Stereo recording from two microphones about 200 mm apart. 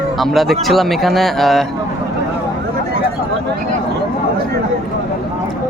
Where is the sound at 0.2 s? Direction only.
Centre (ahead or behind).